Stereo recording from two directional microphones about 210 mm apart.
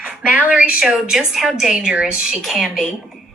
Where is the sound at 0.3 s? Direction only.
5° right (ahead or behind).